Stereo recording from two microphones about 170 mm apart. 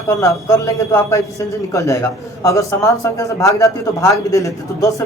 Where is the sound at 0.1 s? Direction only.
15° left (ahead or behind).